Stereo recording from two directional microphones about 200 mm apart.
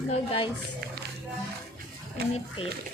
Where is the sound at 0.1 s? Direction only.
30° left (ahead or behind).